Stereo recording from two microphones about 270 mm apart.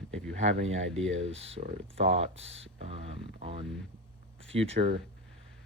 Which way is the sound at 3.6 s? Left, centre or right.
Centre.